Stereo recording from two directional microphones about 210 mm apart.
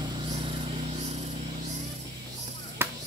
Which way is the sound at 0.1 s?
25° right (ahead or behind).